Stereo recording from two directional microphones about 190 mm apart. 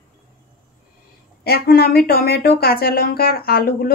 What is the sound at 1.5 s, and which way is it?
A woman's voice, 55° left (ahead or behind).